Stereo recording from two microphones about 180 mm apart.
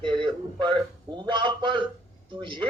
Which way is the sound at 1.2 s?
25° right (ahead or behind).